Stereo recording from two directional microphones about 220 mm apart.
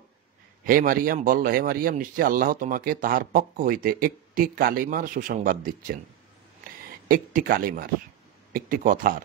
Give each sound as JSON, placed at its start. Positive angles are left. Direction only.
{"t": 0.7, "sound": "speech", "side_deg": -40}
{"t": 7.1, "sound": "speech", "side_deg": -40}